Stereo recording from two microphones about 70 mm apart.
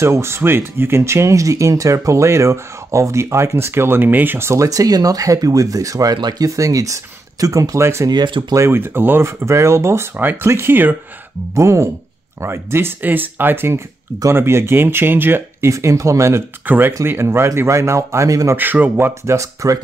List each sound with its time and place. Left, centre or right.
0.0 s speech: right
4.6 s speech: right
8.1 s speech: right
8.5 s speech: right
10.1 s speech: right
11.5 s speech: right
15.7 s speech: right
16.6 s speech: right
17.0 s speech: right
18.6 s speech: right
19.3 s speech: right